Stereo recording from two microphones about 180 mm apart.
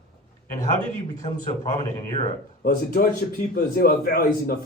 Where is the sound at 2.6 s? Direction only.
55° left (ahead or behind).